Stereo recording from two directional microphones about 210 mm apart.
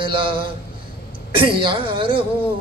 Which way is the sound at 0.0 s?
25° right (ahead or behind).